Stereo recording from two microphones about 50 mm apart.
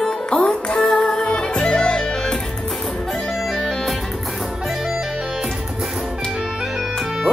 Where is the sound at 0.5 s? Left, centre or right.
Centre.